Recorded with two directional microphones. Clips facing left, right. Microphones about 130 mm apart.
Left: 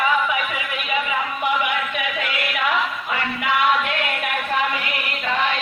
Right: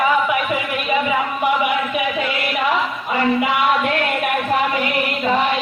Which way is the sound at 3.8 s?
35° right (ahead or behind).